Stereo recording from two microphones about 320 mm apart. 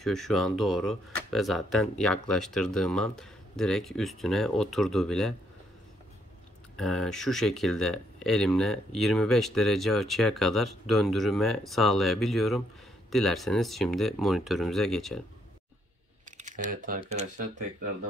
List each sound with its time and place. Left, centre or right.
0.0 s speech: centre
6.8 s speech: centre
16.3 s typing: right
17.1 s speech: right